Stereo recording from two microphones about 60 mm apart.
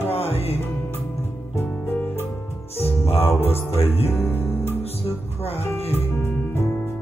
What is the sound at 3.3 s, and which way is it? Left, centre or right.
Music, left.